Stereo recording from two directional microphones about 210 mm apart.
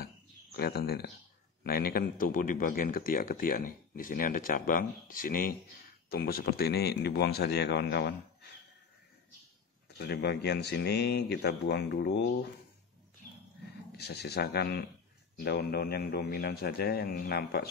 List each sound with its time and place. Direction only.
0.0 s a sound: 50° left (ahead or behind)
1.6 s a man's voice: 45° left (ahead or behind)
9.9 s a man's voice: 50° left (ahead or behind)
13.9 s a man's voice: 50° left (ahead or behind)